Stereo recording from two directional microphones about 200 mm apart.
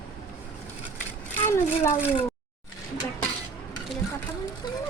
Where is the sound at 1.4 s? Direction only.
10° left (ahead or behind).